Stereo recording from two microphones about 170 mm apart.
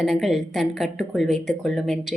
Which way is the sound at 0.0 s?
Centre (ahead or behind).